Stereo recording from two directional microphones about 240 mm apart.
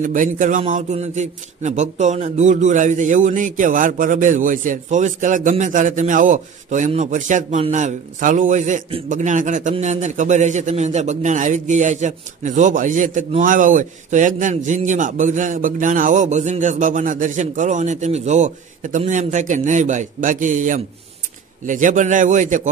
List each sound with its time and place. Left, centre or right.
0.0 s a man's voice: right